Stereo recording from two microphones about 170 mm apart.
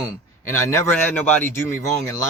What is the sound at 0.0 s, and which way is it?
A man's voice, 15° left (ahead or behind).